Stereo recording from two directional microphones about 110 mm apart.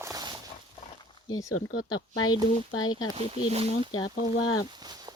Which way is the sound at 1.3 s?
35° left (ahead or behind).